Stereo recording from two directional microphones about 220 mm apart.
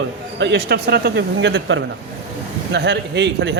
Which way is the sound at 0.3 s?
50° right (ahead or behind).